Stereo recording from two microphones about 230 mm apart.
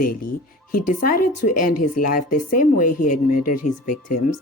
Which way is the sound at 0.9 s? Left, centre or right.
Left.